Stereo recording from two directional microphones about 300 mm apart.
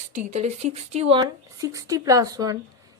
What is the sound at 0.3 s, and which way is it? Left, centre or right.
Speech, right.